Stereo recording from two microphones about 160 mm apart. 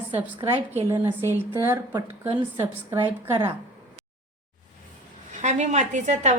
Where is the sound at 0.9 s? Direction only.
15° right (ahead or behind).